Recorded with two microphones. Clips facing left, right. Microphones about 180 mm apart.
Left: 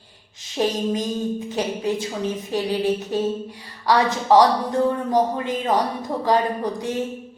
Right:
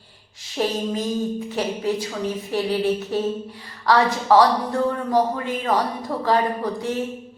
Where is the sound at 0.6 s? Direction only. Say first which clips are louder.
Left 1 dB; 20° left (ahead or behind).